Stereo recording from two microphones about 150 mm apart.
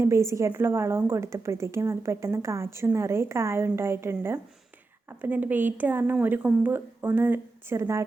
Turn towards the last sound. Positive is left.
turn(degrees=-20)  # may be behind; listen again after turning